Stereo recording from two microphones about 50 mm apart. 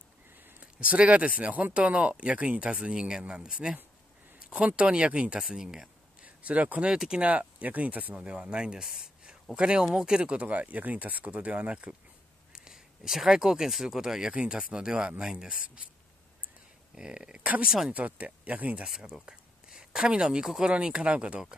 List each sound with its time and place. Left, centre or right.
0.6 s speech: right
5.5 s speech: centre
6.2 s speech: right
8.1 s speech: centre
12.5 s speech: centre
14.3 s speech: right
16.9 s speech: centre
17.9 s speech: right
18.9 s speech: centre
20.7 s speech: centre